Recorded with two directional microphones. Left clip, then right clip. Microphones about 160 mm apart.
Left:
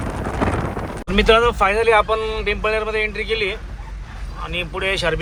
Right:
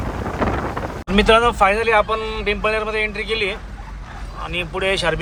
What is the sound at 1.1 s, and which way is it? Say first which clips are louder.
Speech: even; 20° right (ahead or behind).